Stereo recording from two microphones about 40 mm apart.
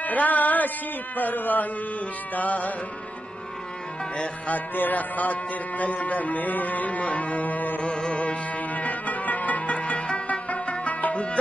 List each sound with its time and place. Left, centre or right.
0.0 s a sound: left
4.5 s a man's voice: left
7.8 s music: left
9.7 s music: left
10.2 s music: left